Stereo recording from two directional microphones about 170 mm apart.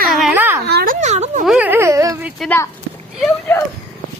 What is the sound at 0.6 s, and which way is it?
Speech, 70° right (ahead or behind).